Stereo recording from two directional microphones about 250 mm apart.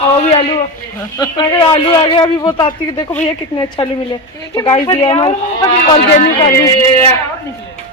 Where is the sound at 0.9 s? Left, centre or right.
Centre.